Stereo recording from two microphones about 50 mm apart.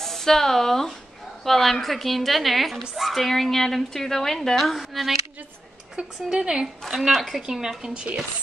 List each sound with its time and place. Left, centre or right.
0.0 s a woman's voice: centre
5.9 s a woman's voice: centre
7.0 s a woman's voice: centre